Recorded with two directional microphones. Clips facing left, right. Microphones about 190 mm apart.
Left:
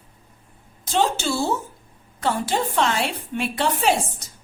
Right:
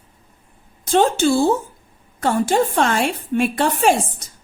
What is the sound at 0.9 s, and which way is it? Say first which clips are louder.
A woman's voice: right 6 dB; 55° right (ahead or behind).